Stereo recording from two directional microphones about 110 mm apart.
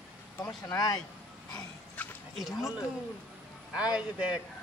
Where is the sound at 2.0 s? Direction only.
15° left (ahead or behind).